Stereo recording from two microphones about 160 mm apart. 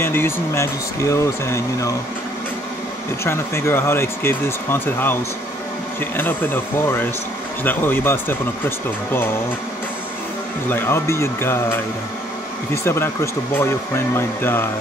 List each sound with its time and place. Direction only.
0.0 s speech: 15° left (ahead or behind)
3.3 s speech: 15° left (ahead or behind)
10.7 s speech: 15° left (ahead or behind)